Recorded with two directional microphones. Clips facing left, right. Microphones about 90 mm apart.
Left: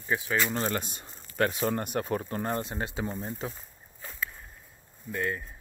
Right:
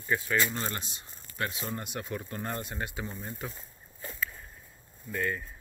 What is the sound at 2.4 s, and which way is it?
Speech, 30° left (ahead or behind).